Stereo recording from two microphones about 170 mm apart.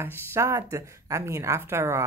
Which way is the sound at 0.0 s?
15° right (ahead or behind).